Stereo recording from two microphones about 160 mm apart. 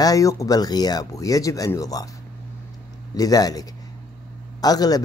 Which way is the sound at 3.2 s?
20° left (ahead or behind).